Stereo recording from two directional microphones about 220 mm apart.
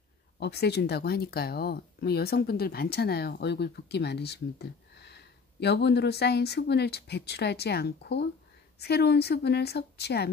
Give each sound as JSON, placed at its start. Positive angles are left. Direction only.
{"t": 0.4, "sound": "speech", "side_deg": 50}